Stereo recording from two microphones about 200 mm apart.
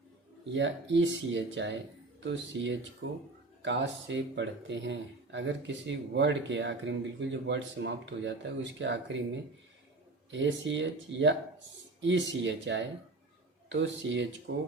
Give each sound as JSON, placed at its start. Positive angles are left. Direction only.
{"t": 0.5, "sound": "speech", "side_deg": -65}
{"t": 3.0, "sound": "speech", "side_deg": -85}
{"t": 3.6, "sound": "speech", "side_deg": -65}
{"t": 10.3, "sound": "speech", "side_deg": -65}